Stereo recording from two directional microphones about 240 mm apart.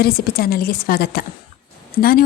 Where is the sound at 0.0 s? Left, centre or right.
Left.